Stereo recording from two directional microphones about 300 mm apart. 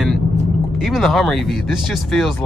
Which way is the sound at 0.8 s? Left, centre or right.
Centre.